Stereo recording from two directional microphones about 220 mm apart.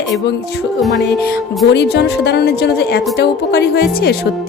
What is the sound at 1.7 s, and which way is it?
A woman's voice, 50° left (ahead or behind).